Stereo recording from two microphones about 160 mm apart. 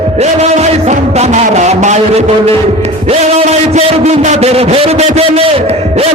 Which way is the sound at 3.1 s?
40° right (ahead or behind).